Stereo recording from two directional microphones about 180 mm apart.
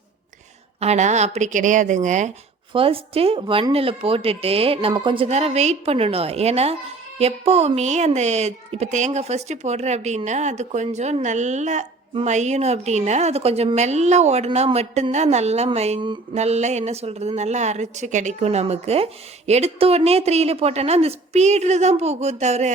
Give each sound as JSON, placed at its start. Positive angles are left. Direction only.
{"t": 0.8, "sound": "speech", "side_deg": -40}
{"t": 2.7, "sound": "a woman's voice", "side_deg": -30}